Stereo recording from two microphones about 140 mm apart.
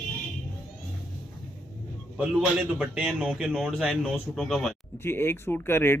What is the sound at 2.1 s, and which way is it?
A man's voice, 5° right (ahead or behind).